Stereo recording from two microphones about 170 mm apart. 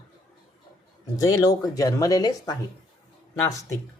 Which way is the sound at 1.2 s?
20° left (ahead or behind).